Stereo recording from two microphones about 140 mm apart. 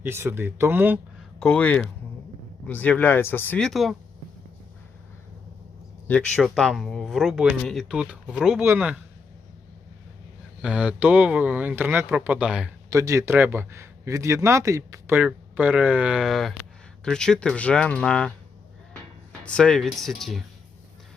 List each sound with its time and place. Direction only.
0.0 s a man's voice: 15° right (ahead or behind)
1.4 s speech: 10° left (ahead or behind)
3.6 s speech: centre (ahead or behind)
6.3 s a man's voice: 5° left (ahead or behind)
10.6 s a man's voice: 5° right (ahead or behind)
12.9 s a man's voice: 25° right (ahead or behind); by 20.4 s centre (ahead or behind)